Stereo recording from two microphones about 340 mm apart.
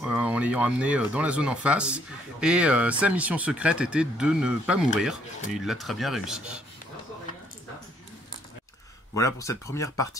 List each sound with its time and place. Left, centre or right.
0.0 s speech: centre
9.1 s speech: centre